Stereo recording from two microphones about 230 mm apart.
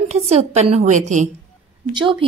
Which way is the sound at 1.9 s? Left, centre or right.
Right.